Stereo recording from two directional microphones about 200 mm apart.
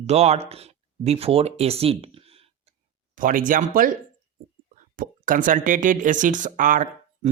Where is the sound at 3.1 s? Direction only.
40° right (ahead or behind).